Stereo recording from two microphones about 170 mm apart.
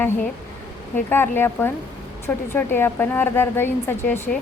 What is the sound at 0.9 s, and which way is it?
A woman's voice, 10° left (ahead or behind).